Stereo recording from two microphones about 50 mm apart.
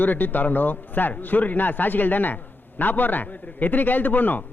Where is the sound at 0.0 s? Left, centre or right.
Left.